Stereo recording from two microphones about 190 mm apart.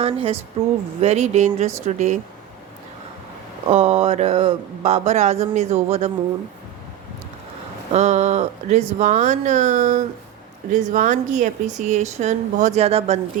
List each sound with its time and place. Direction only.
0.0 s speech: 30° right (ahead or behind)
3.7 s speech: 35° right (ahead or behind)
7.9 s speech: 35° right (ahead or behind)